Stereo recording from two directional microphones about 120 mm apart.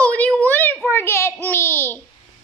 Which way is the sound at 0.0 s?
10° left (ahead or behind).